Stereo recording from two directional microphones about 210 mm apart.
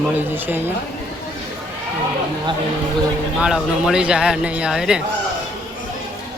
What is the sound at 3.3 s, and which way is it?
Speech, centre (ahead or behind).